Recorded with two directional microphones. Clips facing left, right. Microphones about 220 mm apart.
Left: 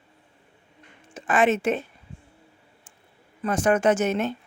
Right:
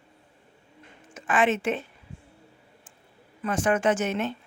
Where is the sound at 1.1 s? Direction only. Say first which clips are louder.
Left 3 dB; 40° left (ahead or behind).